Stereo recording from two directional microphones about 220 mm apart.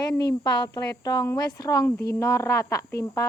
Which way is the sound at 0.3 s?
20° left (ahead or behind).